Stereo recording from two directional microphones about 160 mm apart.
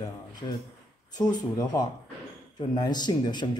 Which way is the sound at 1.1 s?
25° left (ahead or behind).